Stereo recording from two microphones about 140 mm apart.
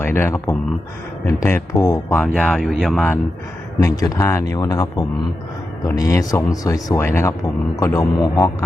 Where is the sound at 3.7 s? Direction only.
25° left (ahead or behind).